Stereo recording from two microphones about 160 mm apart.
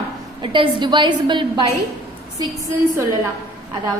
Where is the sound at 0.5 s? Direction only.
30° right (ahead or behind).